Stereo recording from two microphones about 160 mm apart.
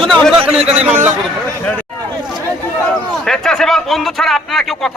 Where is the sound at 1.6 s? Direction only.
10° left (ahead or behind).